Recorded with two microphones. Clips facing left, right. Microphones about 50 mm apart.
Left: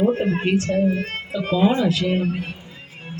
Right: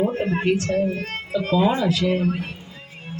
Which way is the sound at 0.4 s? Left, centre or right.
Left.